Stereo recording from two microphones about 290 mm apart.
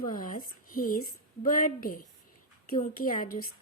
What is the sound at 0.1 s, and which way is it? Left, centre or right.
A woman's voice, left.